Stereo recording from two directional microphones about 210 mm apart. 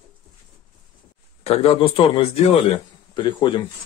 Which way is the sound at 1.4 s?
30° left (ahead or behind).